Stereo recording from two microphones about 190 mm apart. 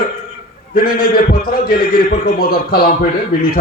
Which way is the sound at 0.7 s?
50° left (ahead or behind).